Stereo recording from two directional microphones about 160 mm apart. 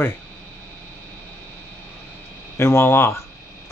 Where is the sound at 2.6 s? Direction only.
15° left (ahead or behind).